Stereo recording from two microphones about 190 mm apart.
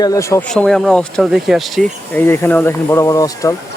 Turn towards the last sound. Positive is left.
turn(degrees=15)  # may be behind; listen again after turning